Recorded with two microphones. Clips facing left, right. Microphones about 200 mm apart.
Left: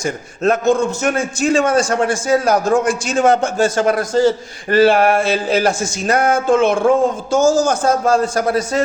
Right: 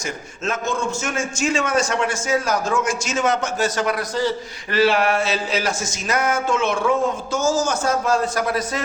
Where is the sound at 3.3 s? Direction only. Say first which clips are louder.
Left 7 dB; 30° left (ahead or behind).